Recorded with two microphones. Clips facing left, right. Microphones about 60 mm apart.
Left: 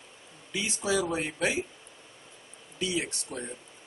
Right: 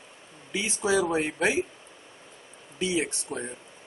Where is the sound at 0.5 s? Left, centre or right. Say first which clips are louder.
Right 3 dB; right.